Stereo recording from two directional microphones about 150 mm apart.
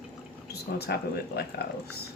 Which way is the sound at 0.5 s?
90° left.